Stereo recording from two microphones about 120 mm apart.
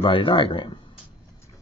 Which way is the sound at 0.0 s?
50° left (ahead or behind).